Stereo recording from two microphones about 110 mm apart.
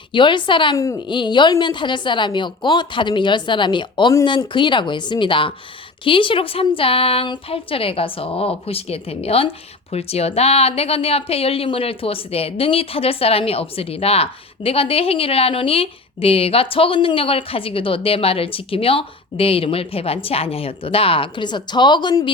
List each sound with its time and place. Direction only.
0.1 s a woman's voice: 50° left (ahead or behind)